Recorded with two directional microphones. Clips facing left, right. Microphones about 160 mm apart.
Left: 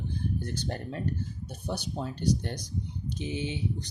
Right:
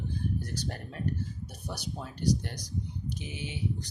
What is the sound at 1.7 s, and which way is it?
Speech, 30° left (ahead or behind).